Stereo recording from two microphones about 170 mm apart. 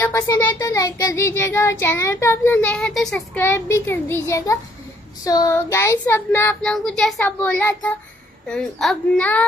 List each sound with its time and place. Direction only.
0.0 s a child's voice: 15° left (ahead or behind)
3.3 s a child's voice: 15° left (ahead or behind)